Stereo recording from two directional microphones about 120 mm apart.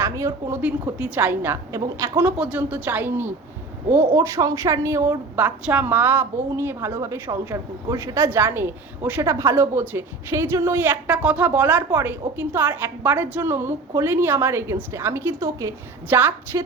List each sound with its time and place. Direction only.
0.0 s speech: 25° right (ahead or behind)
0.6 s a woman's voice: 10° right (ahead or behind)
2.2 s a woman's voice: 10° right (ahead or behind); by 16.7 s 35° right (ahead or behind)